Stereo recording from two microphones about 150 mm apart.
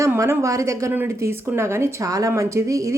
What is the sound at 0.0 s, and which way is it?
Speech, 20° right (ahead or behind).